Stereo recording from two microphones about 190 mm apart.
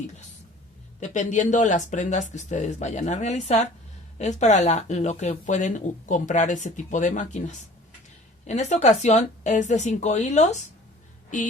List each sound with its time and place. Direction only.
0.9 s speech: 40° left (ahead or behind)